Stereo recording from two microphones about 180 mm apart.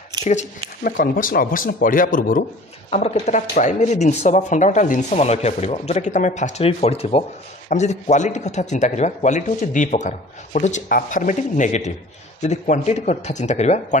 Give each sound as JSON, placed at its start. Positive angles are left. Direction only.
{"t": 0.2, "sound": "speech", "side_deg": 40}
{"t": 0.8, "sound": "speech", "side_deg": 55}
{"t": 2.9, "sound": "speech", "side_deg": 35}